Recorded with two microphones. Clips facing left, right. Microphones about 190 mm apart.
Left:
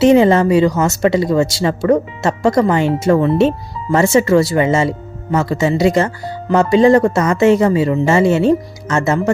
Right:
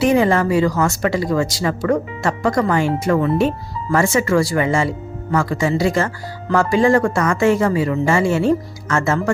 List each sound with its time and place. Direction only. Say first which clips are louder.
0.0 s speech: left 5 dB; 25° left (ahead or behind)